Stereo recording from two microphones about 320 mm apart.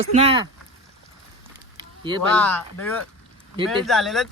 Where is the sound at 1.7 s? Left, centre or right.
Centre.